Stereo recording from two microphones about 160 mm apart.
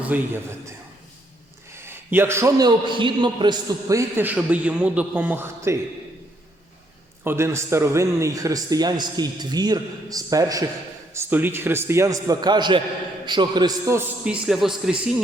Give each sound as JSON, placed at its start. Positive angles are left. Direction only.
{"t": 0.1, "sound": "a man's voice", "side_deg": -10}
{"t": 1.7, "sound": "a man's voice", "side_deg": -15}
{"t": 7.3, "sound": "a man's voice", "side_deg": -15}
{"t": 14.3, "sound": "a man's voice", "side_deg": -5}